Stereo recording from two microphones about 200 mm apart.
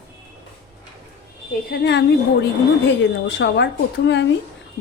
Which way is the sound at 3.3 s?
60° left (ahead or behind).